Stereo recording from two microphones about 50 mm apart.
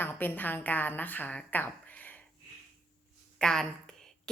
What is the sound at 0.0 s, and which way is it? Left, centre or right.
A woman's voice, left.